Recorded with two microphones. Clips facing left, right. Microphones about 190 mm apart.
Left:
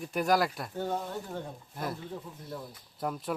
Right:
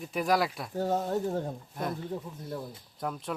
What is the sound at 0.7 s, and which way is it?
Speech, 40° right (ahead or behind).